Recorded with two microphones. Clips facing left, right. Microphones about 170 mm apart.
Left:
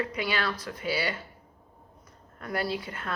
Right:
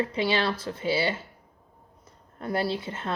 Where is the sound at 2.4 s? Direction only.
25° right (ahead or behind).